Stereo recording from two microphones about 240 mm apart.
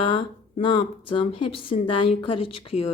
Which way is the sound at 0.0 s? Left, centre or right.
Left.